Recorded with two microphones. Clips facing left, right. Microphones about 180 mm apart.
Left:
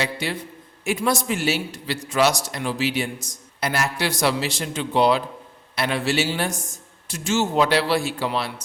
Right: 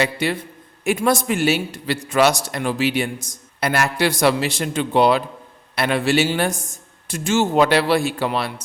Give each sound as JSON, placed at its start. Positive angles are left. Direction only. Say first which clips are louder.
{"t": 0.0, "sound": "a man's voice", "louder": "right 5 dB", "side_deg": -60}